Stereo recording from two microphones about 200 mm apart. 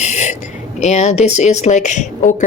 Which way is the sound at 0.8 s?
35° left (ahead or behind).